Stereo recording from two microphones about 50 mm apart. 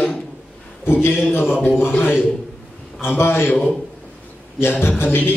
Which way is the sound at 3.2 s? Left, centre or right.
Left.